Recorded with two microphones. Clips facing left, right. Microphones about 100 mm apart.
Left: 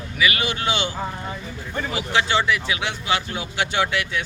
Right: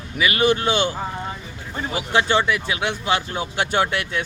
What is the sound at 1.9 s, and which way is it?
Speech, 45° right (ahead or behind).